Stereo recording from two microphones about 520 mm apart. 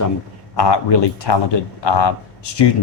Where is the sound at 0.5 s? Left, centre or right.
Left.